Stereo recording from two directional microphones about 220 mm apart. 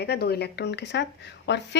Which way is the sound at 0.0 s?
45° left (ahead or behind).